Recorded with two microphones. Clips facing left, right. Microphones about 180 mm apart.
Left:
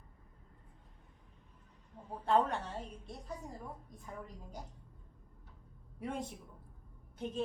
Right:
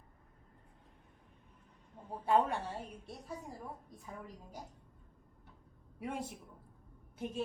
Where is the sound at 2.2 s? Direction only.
10° right (ahead or behind).